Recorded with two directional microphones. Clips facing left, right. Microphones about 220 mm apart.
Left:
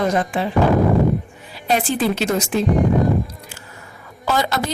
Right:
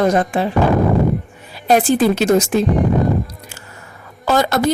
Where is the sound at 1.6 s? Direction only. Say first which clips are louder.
Right 6 dB; 45° right (ahead or behind).